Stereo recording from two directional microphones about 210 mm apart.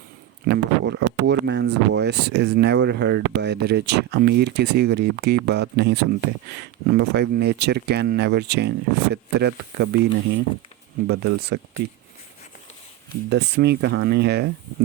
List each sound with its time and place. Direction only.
0.4 s speech: 50° right (ahead or behind)
13.3 s speech: 55° right (ahead or behind)